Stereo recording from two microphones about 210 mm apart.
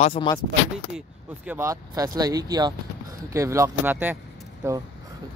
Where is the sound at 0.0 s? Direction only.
25° left (ahead or behind).